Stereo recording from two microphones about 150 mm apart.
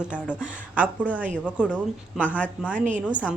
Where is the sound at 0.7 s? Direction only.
10° right (ahead or behind).